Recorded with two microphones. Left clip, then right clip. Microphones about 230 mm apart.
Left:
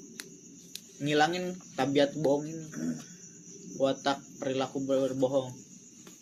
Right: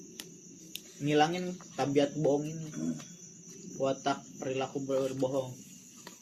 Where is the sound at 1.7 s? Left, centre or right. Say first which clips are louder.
Left 2 dB; left.